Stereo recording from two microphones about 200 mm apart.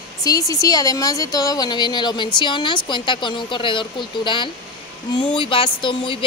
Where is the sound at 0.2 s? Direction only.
15° left (ahead or behind).